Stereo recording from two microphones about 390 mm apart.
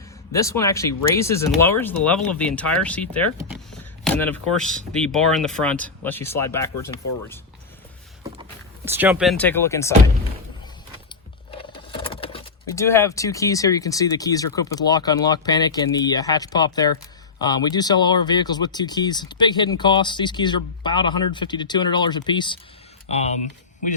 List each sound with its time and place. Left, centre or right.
0.3 s speech: centre
8.2 s speech: centre
11.5 s speech: centre